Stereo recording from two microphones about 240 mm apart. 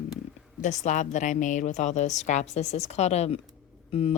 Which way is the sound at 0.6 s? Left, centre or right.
Left.